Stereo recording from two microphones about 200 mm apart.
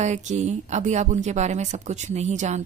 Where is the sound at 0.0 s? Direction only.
35° right (ahead or behind).